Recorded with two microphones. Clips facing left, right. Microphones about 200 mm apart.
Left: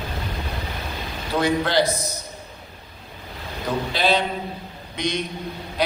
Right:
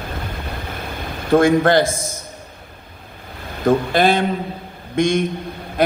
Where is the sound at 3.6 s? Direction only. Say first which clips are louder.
Right 7 dB; 50° right (ahead or behind).